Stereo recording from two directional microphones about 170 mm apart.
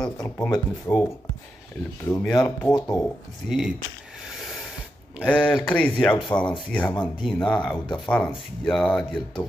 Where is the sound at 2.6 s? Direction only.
25° left (ahead or behind).